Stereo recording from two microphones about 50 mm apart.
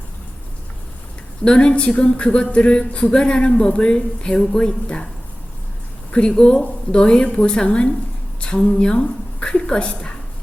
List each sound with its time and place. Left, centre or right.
1.5 s speech: left
6.1 s a woman's voice: centre